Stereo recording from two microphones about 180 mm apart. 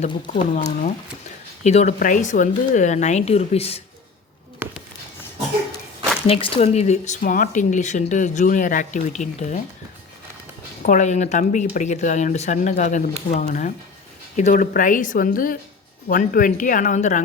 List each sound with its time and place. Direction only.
0.5 s speech: 45° left (ahead or behind)
4.6 s a sound: 10° right (ahead or behind)
6.2 s speech: 30° left (ahead or behind)
10.8 s speech: 45° left (ahead or behind)